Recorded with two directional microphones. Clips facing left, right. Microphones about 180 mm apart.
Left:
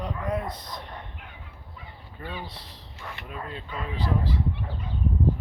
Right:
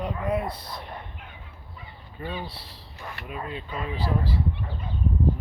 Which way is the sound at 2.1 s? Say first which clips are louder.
Right 4 dB; 20° right (ahead or behind).